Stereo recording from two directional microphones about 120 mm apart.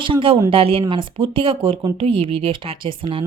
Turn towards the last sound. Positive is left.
turn(degrees=-45)  # may be behind; listen again after turning